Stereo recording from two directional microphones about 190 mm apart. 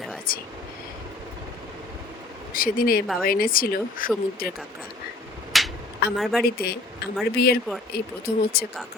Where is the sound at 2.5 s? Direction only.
50° left (ahead or behind).